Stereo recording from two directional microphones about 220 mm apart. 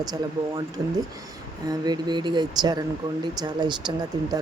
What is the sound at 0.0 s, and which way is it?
Speech, 15° right (ahead or behind).